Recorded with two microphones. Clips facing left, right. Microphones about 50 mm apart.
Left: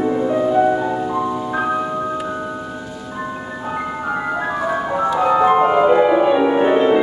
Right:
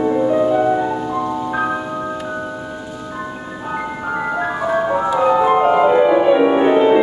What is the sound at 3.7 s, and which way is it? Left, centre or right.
Ice cream truck, centre.